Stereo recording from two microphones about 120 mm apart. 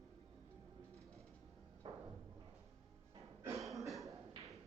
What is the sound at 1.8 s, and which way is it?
Music, 45° right (ahead or behind).